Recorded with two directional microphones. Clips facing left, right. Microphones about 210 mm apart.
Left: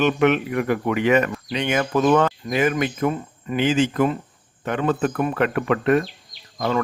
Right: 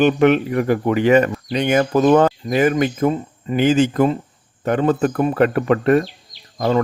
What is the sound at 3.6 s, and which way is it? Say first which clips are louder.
Speech: right 4 dB; 40° right (ahead or behind).